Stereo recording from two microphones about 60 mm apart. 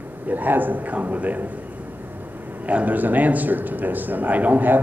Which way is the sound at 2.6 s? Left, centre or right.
Right.